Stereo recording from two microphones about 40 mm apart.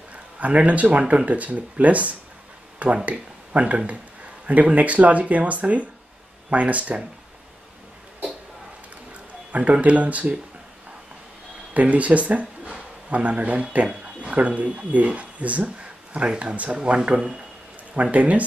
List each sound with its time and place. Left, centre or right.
0.1 s speech: right
9.5 s speech: right
11.7 s speech: right